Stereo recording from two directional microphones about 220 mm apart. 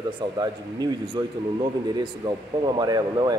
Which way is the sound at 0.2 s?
20° right (ahead or behind).